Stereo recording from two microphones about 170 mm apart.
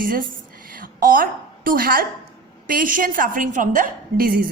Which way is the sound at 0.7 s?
55° right (ahead or behind).